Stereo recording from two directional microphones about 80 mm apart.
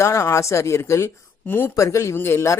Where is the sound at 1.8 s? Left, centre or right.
Left.